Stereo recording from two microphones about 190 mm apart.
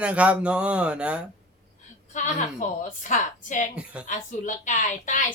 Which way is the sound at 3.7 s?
5° right (ahead or behind).